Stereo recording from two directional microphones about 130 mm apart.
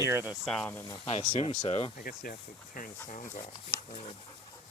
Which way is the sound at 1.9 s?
90° left.